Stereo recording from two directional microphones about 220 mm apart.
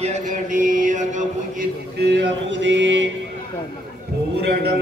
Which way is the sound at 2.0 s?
55° right (ahead or behind).